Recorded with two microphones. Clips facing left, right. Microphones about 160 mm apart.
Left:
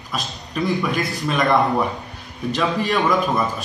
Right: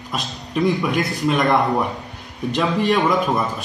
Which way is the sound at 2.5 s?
20° right (ahead or behind).